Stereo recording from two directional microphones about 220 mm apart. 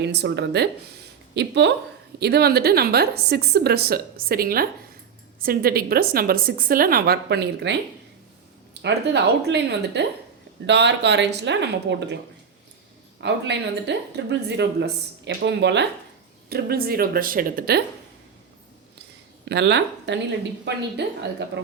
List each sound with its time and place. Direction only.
0.0 s speech: 50° right (ahead or behind)
13.2 s speech: 50° right (ahead or behind)
19.5 s speech: 50° right (ahead or behind)